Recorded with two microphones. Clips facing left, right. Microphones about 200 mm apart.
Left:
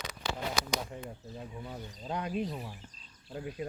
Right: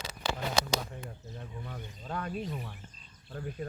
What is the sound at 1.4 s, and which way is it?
Speech, 10° left (ahead or behind).